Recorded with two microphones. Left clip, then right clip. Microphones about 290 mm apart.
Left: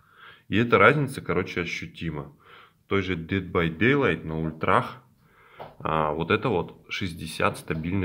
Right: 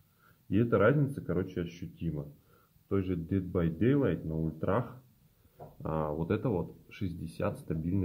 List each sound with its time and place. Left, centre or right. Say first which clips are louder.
0.5 s speech: left 8 dB; centre